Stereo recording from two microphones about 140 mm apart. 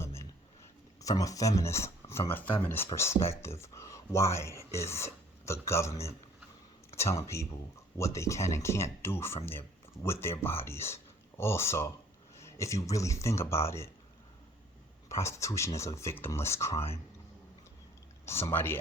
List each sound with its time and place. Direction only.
0.0 s a sound: 20° left (ahead or behind)
1.0 s speech: 25° left (ahead or behind)
15.2 s speech: 20° left (ahead or behind)
18.3 s speech: 20° left (ahead or behind)